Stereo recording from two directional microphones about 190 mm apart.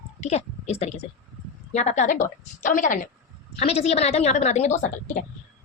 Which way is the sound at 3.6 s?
30° left (ahead or behind).